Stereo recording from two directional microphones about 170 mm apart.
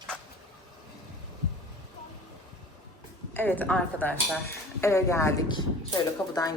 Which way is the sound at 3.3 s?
10° left (ahead or behind).